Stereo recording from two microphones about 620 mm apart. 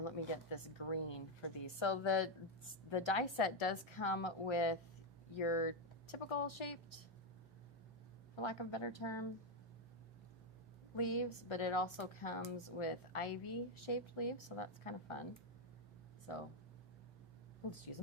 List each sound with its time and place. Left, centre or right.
0.5 s a woman's voice: left
8.4 s a woman's voice: left
10.9 s a woman's voice: left
16.3 s a woman's voice: left